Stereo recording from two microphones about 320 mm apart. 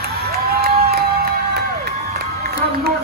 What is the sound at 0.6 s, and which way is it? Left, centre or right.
Crowd, right.